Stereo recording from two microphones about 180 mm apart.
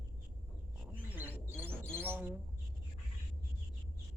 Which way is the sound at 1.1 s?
10° right (ahead or behind).